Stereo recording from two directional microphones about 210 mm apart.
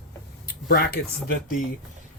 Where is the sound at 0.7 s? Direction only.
50° left (ahead or behind).